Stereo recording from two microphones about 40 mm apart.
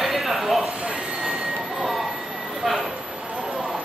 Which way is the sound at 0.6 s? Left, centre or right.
Right.